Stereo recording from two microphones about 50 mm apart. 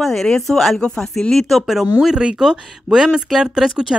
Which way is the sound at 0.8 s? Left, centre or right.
Centre.